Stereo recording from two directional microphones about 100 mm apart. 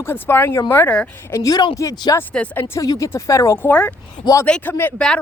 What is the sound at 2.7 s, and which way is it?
Speech, 35° left (ahead or behind).